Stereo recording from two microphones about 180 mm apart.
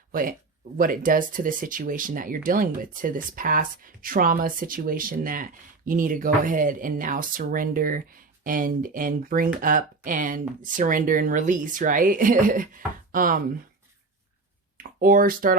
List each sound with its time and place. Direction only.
0.1 s speech: 50° right (ahead or behind)
14.8 s speech: 50° right (ahead or behind)